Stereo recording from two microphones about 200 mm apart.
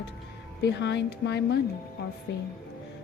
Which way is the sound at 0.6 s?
60° left (ahead or behind).